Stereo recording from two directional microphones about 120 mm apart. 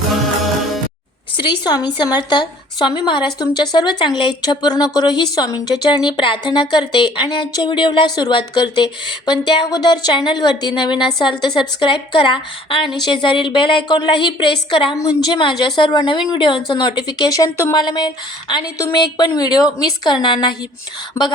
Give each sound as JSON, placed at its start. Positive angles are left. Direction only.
{"t": 1.4, "sound": "a woman's voice", "side_deg": 40}
{"t": 21.2, "sound": "speech", "side_deg": 25}